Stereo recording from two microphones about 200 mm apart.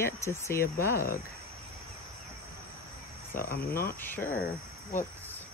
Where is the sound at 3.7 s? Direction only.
50° left (ahead or behind).